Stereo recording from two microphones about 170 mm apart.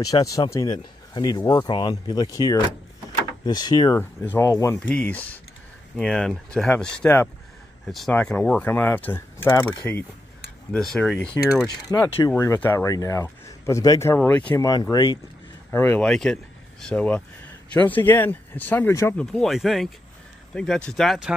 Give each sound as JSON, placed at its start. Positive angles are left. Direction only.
{"t": 0.0, "sound": "speech", "side_deg": 20}
{"t": 4.7, "sound": "speech", "side_deg": 10}
{"t": 11.6, "sound": "speech", "side_deg": 20}
{"t": 14.6, "sound": "speech", "side_deg": 25}
{"t": 15.7, "sound": "speech", "side_deg": 15}